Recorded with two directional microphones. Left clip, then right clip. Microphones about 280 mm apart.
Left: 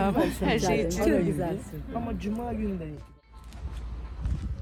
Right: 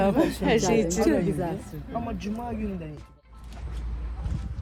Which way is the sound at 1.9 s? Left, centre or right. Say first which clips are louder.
Right 2 dB; centre.